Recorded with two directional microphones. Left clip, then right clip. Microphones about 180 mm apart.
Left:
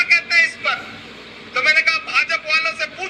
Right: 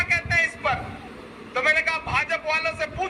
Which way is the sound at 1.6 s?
Centre (ahead or behind).